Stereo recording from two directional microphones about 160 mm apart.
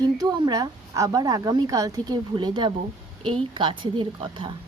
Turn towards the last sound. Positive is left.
turn(degrees=-30)  # may be behind; listen again after turning